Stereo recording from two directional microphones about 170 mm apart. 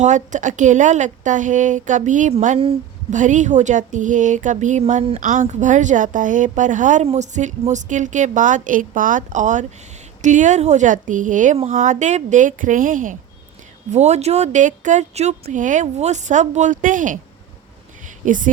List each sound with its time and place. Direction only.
0.0 s a woman's voice: 45° right (ahead or behind)
18.3 s a woman's voice: 50° right (ahead or behind)